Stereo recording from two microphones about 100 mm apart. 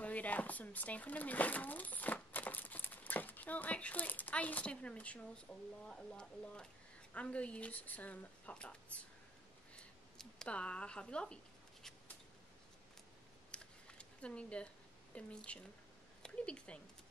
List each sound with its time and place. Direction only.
0.0 s speech: 15° left (ahead or behind)
9.8 s a sound: 10° left (ahead or behind)
13.5 s camera: 10° left (ahead or behind)
15.1 s speech: 10° left (ahead or behind)